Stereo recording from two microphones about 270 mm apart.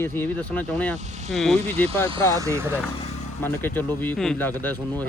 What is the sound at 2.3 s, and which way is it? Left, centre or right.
Speech, centre.